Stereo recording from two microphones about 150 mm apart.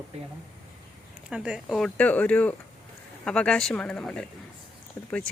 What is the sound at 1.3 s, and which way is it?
A woman's voice, 5° right (ahead or behind).